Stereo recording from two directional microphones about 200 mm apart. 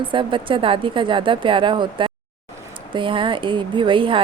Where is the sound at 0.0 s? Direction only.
25° right (ahead or behind).